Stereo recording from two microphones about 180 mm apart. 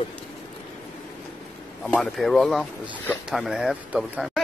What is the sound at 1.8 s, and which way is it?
Speech, 5° left (ahead or behind).